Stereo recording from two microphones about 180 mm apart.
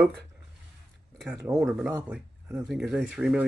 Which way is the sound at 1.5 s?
5° right (ahead or behind).